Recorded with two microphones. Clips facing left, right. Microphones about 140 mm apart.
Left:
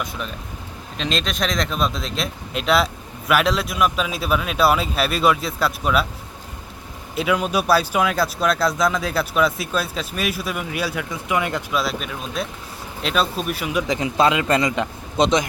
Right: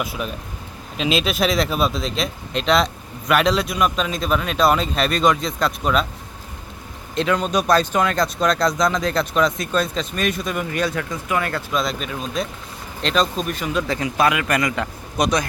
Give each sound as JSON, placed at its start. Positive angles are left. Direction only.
{"t": 0.0, "sound": "speech", "side_deg": -5}
{"t": 7.2, "sound": "speech", "side_deg": 5}
{"t": 11.7, "sound": "speech", "side_deg": 5}